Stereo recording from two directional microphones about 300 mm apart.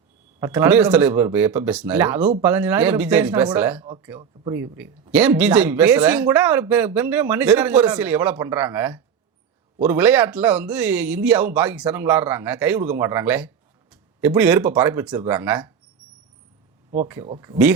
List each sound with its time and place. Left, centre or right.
0.3 s speech: centre
17.2 s speech: centre